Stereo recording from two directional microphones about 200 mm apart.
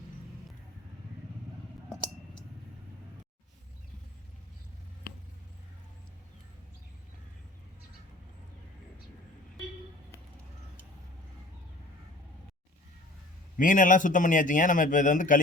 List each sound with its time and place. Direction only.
13.6 s a man's voice: 40° left (ahead or behind)